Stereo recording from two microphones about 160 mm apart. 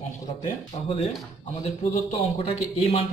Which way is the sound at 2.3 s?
40° left (ahead or behind).